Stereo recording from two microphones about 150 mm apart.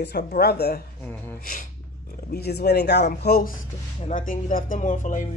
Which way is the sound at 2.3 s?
90° left.